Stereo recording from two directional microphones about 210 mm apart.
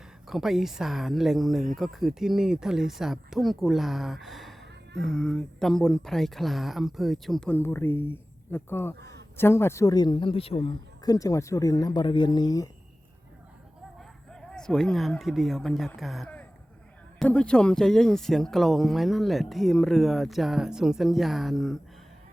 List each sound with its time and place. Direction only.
0.3 s speech: centre (ahead or behind)
9.0 s a sound: 55° right (ahead or behind)
9.4 s speech: 10° left (ahead or behind)
14.5 s speech: 5° left (ahead or behind)